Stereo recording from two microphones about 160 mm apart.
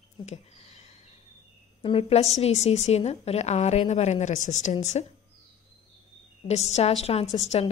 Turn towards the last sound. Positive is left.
turn(degrees=40)  # may be behind; listen again after turning